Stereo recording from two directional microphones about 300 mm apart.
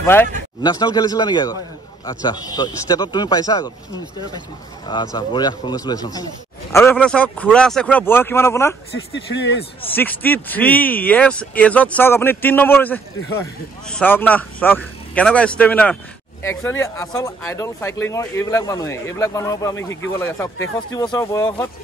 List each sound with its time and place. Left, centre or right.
0.0 s speech: centre
4.8 s speech: centre
9.1 s speech: left
9.9 s speech: centre